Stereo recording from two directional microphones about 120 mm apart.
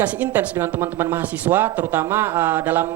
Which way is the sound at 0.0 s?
15° right (ahead or behind).